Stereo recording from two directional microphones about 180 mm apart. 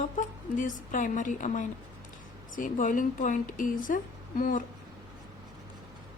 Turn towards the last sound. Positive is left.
turn(degrees=45)  # may be behind; listen again after turning